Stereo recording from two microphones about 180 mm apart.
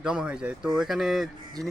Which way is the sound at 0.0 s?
5° right (ahead or behind).